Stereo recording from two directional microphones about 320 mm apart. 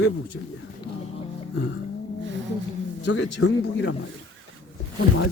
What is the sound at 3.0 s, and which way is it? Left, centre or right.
Speech, left.